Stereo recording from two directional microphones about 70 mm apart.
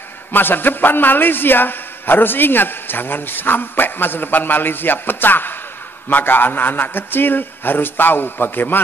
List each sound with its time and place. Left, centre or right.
0.3 s a man's voice: left